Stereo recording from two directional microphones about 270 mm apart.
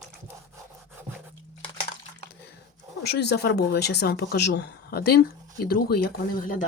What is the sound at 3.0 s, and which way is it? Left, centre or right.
Speech, left.